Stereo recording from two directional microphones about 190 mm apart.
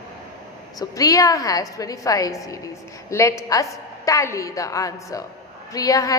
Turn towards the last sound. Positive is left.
turn(degrees=20)  # may be behind; listen again after turning